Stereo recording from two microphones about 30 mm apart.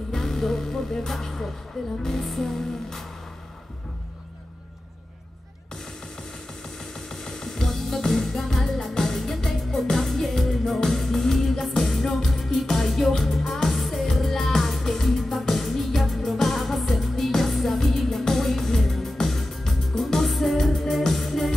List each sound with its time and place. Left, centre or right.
0.1 s music: centre
1.8 s speech: centre
2.1 s music: centre
7.1 s music: centre